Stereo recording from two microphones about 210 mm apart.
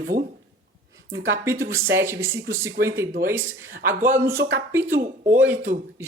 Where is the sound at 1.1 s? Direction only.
50° right (ahead or behind).